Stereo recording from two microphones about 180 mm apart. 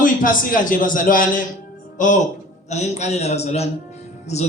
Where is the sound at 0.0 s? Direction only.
50° left (ahead or behind).